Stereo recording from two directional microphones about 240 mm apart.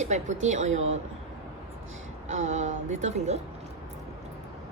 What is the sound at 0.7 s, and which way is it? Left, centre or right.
Speech, right.